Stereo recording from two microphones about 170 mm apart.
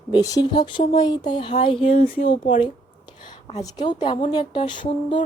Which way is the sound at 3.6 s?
25° left (ahead or behind).